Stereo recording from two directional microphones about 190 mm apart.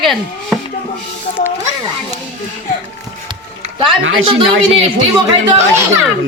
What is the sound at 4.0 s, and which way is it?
Speech, 90° right.